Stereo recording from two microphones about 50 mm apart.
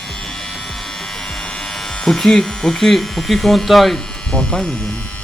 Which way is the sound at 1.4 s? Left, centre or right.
Centre.